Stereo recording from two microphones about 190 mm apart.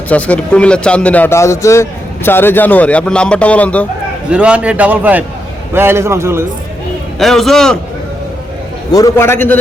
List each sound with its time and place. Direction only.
0.1 s a man's voice: 5° left (ahead or behind)
4.3 s a man's voice: 5° right (ahead or behind)
7.2 s a man's voice: centre (ahead or behind)
8.9 s a man's voice: 15° left (ahead or behind)